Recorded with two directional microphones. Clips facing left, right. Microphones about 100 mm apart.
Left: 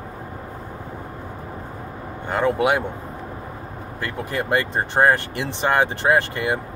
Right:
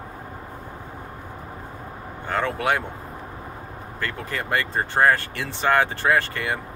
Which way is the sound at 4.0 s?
20° left (ahead or behind).